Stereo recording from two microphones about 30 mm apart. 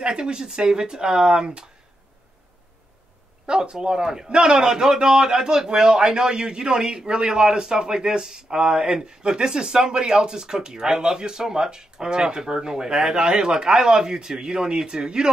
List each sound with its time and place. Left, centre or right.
0.0 s speech: right
3.4 s speech: right